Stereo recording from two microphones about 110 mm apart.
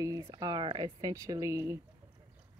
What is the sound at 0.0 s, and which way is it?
Speech, 35° right (ahead or behind).